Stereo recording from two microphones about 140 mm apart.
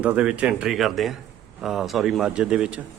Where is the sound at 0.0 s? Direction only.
10° right (ahead or behind).